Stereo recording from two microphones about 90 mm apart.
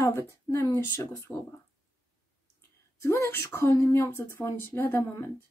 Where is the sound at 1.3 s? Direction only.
5° right (ahead or behind).